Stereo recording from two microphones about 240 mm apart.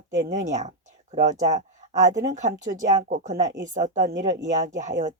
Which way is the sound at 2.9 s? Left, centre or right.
Right.